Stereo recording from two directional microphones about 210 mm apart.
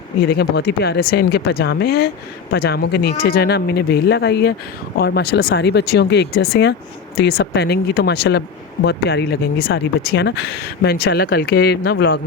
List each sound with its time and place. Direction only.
0.3 s speech: 50° left (ahead or behind)